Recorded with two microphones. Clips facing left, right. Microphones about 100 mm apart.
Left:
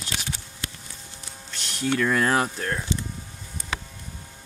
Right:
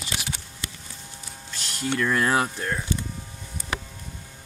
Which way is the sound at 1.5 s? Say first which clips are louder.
Left 2 dB; centre (ahead or behind).